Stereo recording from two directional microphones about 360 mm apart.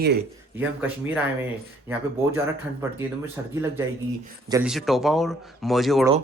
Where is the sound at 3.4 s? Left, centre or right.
Centre.